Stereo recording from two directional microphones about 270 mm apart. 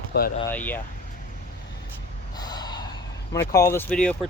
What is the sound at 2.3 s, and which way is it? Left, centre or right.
Gasp, centre.